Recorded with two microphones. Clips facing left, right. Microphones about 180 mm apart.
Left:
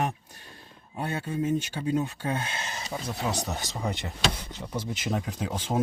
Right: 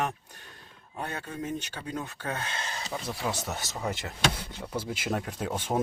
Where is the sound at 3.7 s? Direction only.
5° right (ahead or behind).